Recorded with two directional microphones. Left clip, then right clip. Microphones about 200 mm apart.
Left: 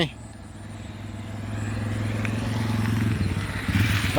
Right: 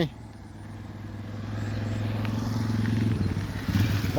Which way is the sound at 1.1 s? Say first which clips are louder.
Left 2 dB; 35° left (ahead or behind).